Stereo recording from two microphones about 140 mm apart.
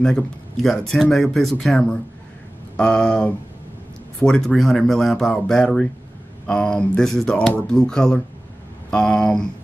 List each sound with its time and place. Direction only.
0.0 s speech: 5° left (ahead or behind)